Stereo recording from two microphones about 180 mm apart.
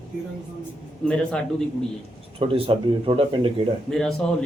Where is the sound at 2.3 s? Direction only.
30° right (ahead or behind).